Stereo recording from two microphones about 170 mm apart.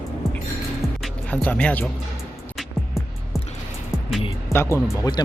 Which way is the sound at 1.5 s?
10° left (ahead or behind).